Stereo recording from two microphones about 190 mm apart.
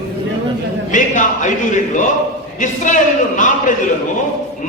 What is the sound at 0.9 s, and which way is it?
A man's voice, 40° left (ahead or behind).